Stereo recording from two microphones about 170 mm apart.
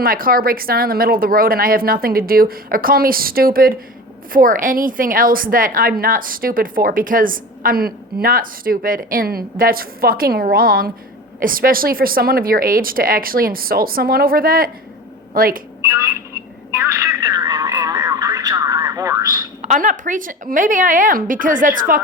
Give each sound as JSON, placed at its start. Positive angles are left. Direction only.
{"t": 0.0, "sound": "a woman's voice", "side_deg": -60}
{"t": 16.8, "sound": "telephone", "side_deg": -15}
{"t": 17.2, "sound": "radio", "side_deg": -20}
{"t": 19.6, "sound": "a woman's voice", "side_deg": -45}